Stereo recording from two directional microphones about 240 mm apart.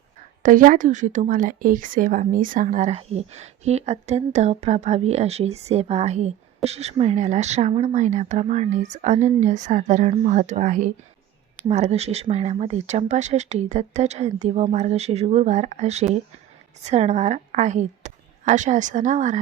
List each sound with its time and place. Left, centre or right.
0.4 s a woman's voice: right